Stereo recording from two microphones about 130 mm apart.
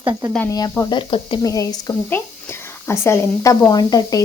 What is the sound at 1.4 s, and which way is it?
Speech, 25° left (ahead or behind).